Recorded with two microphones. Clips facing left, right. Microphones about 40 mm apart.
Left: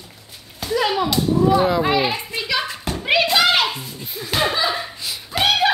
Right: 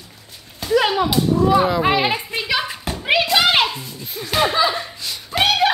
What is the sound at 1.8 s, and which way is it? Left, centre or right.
Speech, right.